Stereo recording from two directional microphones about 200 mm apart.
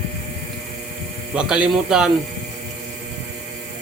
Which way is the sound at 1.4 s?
5° right (ahead or behind).